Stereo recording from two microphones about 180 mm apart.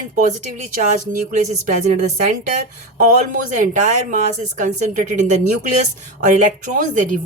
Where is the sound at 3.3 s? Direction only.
45° right (ahead or behind).